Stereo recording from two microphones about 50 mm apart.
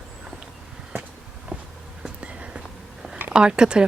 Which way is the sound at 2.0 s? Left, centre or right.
Centre.